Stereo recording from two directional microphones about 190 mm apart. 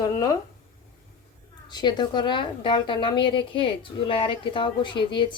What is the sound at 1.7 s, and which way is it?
A woman's voice, 20° left (ahead or behind).